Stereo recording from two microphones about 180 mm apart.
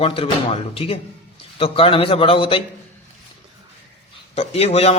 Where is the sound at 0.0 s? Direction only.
30° left (ahead or behind).